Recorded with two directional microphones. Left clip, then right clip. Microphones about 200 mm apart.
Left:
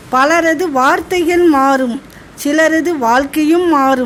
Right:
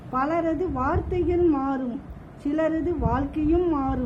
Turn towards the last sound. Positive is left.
turn(degrees=30)  # may be behind; listen again after turning